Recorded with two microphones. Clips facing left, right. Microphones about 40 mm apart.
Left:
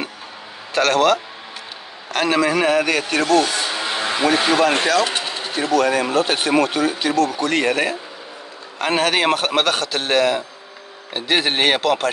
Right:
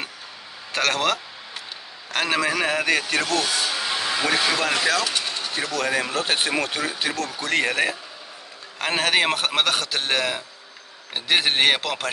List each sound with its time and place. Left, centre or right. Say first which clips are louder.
0.7 s a man's voice: left 7 dB; centre
3.5 s vehicle: left 2 dB; left
5.0 s sewing machine: left 3 dB; left
5.5 s a man's voice: left 8 dB; centre